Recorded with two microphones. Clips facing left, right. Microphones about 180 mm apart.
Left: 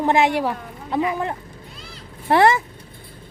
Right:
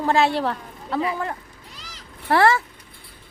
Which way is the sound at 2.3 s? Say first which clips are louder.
Left 2 dB; 20° left (ahead or behind).